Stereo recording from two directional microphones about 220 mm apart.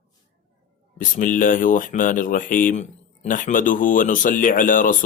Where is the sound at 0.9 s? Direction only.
35° left (ahead or behind).